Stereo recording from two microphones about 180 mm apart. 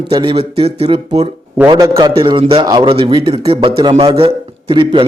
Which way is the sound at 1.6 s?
20° right (ahead or behind).